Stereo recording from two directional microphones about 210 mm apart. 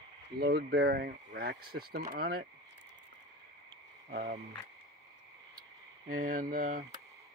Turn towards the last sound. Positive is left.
turn(degrees=-35)  # may be behind; listen again after turning